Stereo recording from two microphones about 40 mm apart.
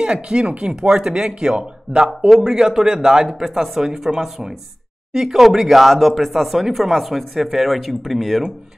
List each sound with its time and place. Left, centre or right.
0.0 s speech: right
2.0 s speech: centre